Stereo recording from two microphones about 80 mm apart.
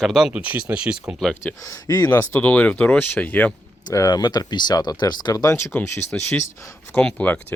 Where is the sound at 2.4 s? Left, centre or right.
Centre.